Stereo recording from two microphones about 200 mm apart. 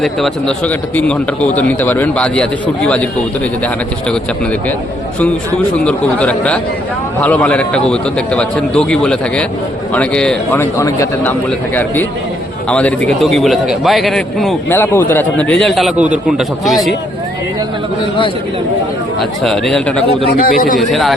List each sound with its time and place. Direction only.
0.0 s a man's voice: 5° left (ahead or behind)
5.7 s a man's voice: 5° left (ahead or behind)
19.2 s a man's voice: centre (ahead or behind)
20.4 s a man's voice: 45° left (ahead or behind)
20.7 s a man's voice: centre (ahead or behind)